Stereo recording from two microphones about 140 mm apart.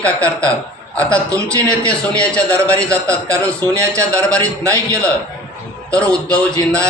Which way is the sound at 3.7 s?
20° right (ahead or behind).